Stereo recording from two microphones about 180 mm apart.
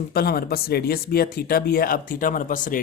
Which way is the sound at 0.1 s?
60° left (ahead or behind).